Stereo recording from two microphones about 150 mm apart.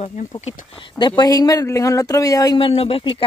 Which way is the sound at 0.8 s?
30° left (ahead or behind).